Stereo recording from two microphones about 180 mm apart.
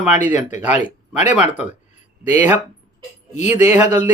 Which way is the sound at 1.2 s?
10° right (ahead or behind).